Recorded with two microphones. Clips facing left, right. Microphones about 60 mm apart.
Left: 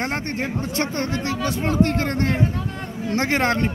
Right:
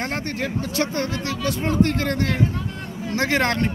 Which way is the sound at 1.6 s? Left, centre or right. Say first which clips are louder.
Even; centre.